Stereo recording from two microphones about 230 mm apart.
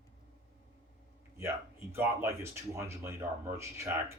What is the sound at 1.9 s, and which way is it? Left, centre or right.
Speech, centre.